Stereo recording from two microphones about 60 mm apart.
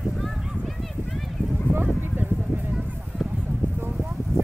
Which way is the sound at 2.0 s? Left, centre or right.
Right.